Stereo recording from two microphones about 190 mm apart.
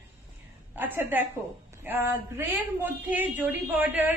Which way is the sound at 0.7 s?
10° right (ahead or behind).